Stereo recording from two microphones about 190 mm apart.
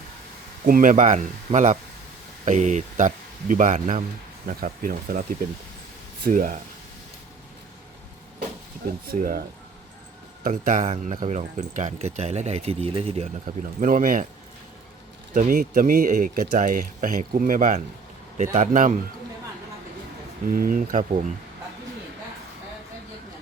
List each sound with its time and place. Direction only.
0.6 s speech: 45° right (ahead or behind)
6.2 s speech: 45° right (ahead or behind)
9.0 s speech: 50° right (ahead or behind)
10.4 s speech: 45° right (ahead or behind)
13.7 s speech: 45° right (ahead or behind)
15.4 s speech: 45° right (ahead or behind)
20.5 s speech: 50° right (ahead or behind)